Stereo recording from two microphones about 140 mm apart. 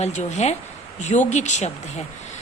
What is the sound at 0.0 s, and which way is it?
A woman's voice, 55° left (ahead or behind).